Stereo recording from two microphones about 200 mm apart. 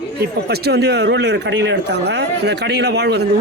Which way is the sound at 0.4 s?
55° right (ahead or behind).